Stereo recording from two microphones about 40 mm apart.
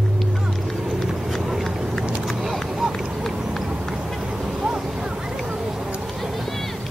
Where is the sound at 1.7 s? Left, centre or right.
Centre.